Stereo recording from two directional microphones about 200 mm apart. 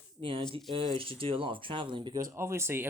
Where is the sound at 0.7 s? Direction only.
25° right (ahead or behind).